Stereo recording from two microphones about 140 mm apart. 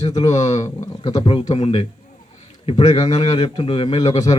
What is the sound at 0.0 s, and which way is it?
A man's voice, 30° left (ahead or behind).